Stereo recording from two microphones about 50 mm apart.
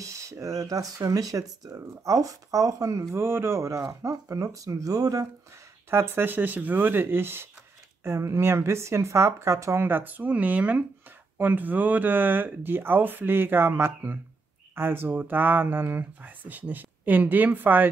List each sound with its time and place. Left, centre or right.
0.0 s a sound: right
1.3 s speech: right
5.9 s speech: right
8.0 s speech: right
9.8 s speech: right
16.2 s speech: right